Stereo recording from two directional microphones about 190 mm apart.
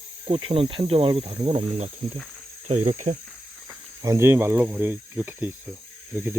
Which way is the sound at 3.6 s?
15° right (ahead or behind).